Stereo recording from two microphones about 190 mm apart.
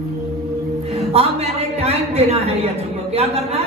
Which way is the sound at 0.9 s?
30° right (ahead or behind).